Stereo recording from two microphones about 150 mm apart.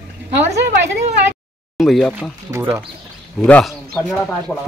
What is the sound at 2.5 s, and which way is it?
Speech, 15° right (ahead or behind).